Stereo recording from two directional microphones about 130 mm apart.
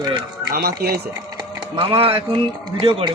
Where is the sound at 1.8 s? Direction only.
45° right (ahead or behind).